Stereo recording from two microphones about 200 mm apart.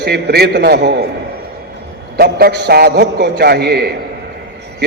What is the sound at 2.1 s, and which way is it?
A man's voice, 50° right (ahead or behind).